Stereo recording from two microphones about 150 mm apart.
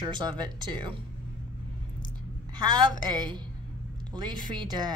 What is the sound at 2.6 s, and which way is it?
A woman's voice, 30° right (ahead or behind).